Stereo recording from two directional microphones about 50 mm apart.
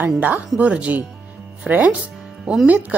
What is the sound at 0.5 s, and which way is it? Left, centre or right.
Speech, right.